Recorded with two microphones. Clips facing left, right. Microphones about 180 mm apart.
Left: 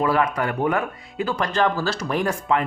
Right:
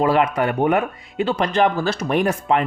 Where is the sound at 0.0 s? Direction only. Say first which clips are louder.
Right 3 dB; 25° right (ahead or behind).